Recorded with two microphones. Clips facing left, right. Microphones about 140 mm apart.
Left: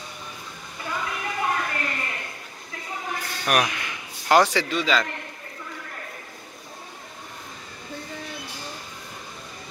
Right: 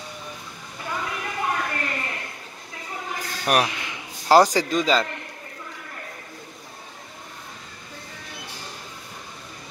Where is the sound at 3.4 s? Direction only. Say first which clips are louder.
Right 2 dB; 30° right (ahead or behind).